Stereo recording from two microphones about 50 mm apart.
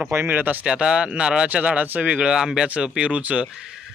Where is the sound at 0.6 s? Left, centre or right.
Centre.